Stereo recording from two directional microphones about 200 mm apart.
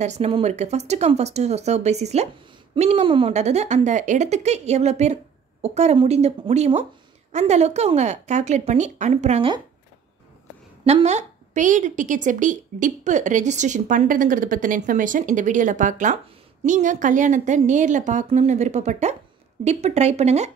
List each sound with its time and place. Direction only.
0.0 s a woman's voice: 35° right (ahead or behind)
10.9 s a woman's voice: 35° right (ahead or behind)